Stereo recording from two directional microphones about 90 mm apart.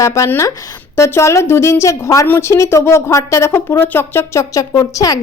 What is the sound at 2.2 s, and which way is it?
Speech, 20° left (ahead or behind).